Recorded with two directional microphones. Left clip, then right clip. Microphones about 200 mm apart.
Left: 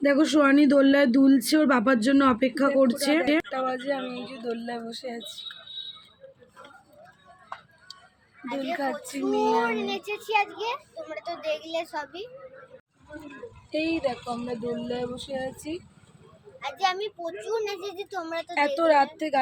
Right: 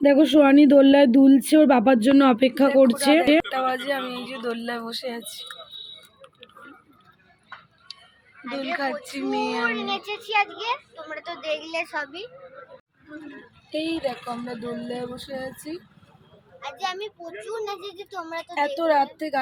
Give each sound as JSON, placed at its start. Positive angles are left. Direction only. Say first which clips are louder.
{"t": 0.0, "sound": "speech", "louder": "right 5 dB", "side_deg": -15}
{"t": 3.5, "sound": "a child's voice", "louder": "right 4 dB", "side_deg": 5}
{"t": 7.9, "sound": "a sound", "louder": "right 4 dB", "side_deg": 15}
{"t": 8.4, "sound": "a woman's voice", "louder": "right 2 dB", "side_deg": 5}
{"t": 13.7, "sound": "speech", "louder": "even", "side_deg": -10}
{"t": 16.6, "sound": "a woman's voice", "louder": "left 3 dB", "side_deg": 10}
{"t": 18.8, "sound": "speech", "louder": "even", "side_deg": -10}